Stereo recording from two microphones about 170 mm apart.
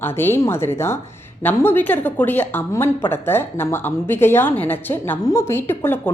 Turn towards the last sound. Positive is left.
turn(degrees=15)  # may be behind; listen again after turning